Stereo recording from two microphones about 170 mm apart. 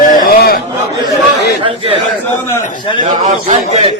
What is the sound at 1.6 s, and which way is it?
Speech, 35° right (ahead or behind).